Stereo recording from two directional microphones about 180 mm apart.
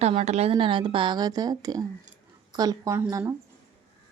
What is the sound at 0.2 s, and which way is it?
A woman's voice, 35° right (ahead or behind).